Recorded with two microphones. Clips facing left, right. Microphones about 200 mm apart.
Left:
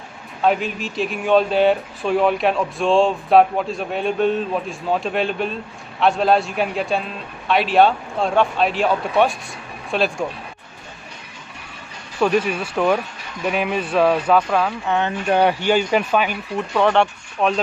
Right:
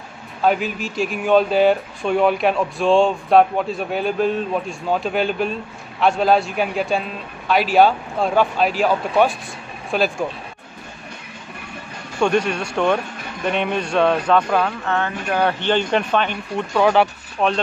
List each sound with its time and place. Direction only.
0.4 s speech: centre (ahead or behind)
12.2 s speech: 5° left (ahead or behind)
14.9 s speech: 20° left (ahead or behind)
15.6 s speech: 5° left (ahead or behind)